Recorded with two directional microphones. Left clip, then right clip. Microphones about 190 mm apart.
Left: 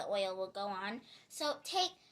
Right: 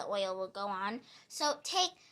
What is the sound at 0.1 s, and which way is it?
A child's voice, 35° right (ahead or behind).